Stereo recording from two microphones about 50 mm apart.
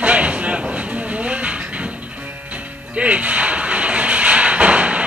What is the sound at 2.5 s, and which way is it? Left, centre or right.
Music, right.